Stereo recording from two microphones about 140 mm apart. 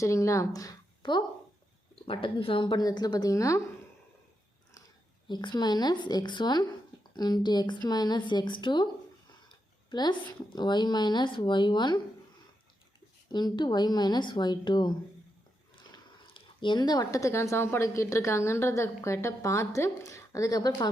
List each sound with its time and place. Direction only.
0.0 s speech: 20° left (ahead or behind)
5.3 s speech: 35° left (ahead or behind)
9.9 s speech: 30° left (ahead or behind)
13.3 s speech: 30° left (ahead or behind)